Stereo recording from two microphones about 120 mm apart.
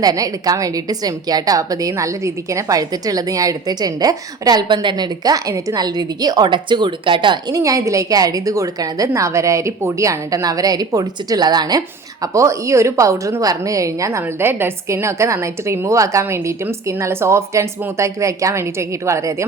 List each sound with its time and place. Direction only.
0.0 s a woman's voice: 30° right (ahead or behind)
7.6 s speech: 25° right (ahead or behind)